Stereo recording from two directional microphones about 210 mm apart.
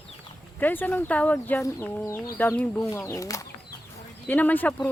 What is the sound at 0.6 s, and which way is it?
Speech, 10° left (ahead or behind).